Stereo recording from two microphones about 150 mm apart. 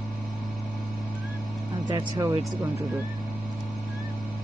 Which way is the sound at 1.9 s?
25° right (ahead or behind).